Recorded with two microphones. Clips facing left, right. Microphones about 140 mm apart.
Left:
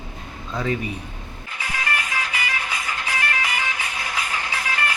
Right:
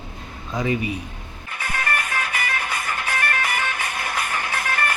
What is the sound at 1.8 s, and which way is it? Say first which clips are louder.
Music: right 1 dB; 60° right (ahead or behind).